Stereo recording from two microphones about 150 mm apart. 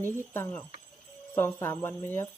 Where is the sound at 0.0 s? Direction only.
15° left (ahead or behind).